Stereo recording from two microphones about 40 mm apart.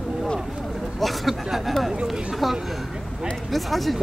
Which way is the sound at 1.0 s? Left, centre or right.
Centre.